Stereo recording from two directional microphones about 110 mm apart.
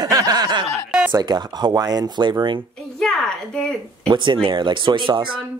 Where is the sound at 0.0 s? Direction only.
35° right (ahead or behind).